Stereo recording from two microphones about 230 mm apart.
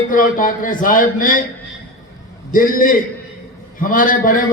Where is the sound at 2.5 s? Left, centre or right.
Left.